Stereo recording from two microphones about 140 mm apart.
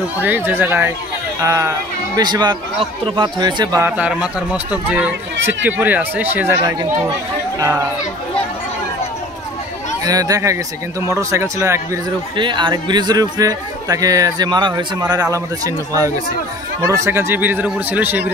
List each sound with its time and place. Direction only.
0.2 s a man's voice: 15° right (ahead or behind); by 3.8 s 30° right (ahead or behind)
3.8 s speech: 10° right (ahead or behind)
10.0 s a man's voice: 25° right (ahead or behind)
12.4 s a man's voice: 35° right (ahead or behind); by 18.3 s 15° right (ahead or behind)